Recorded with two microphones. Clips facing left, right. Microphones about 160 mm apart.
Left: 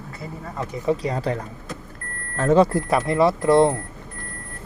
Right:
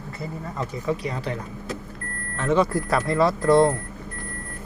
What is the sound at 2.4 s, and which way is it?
Speech, 35° left (ahead or behind).